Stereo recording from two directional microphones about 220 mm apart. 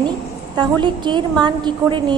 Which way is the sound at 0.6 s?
20° right (ahead or behind).